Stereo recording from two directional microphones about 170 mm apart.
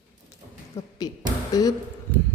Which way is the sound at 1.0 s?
25° left (ahead or behind).